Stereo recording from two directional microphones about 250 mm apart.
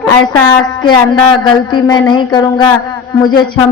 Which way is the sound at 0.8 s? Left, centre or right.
Centre.